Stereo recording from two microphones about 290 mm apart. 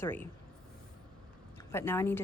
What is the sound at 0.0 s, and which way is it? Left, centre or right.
Speech, centre.